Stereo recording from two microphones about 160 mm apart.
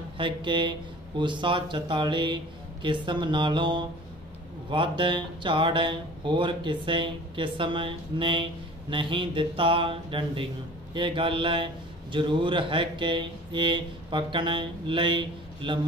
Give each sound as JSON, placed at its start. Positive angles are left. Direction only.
{"t": 0.2, "sound": "speech", "side_deg": -30}